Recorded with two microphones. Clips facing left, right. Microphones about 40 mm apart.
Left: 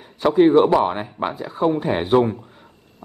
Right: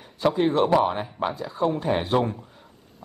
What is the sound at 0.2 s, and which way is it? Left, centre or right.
A man's voice, centre.